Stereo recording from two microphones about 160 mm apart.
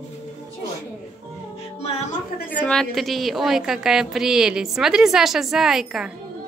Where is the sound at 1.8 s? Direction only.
40° left (ahead or behind).